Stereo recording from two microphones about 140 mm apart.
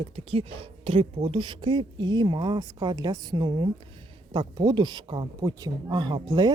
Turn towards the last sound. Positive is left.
turn(degrees=-30)  # may be behind; listen again after turning